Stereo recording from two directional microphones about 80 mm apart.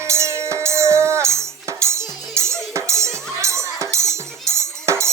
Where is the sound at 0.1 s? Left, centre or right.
Right.